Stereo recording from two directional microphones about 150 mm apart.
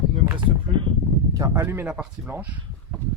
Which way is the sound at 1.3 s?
20° right (ahead or behind).